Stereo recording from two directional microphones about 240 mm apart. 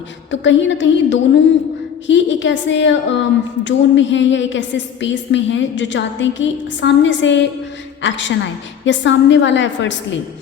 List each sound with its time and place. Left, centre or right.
0.3 s a woman's voice: left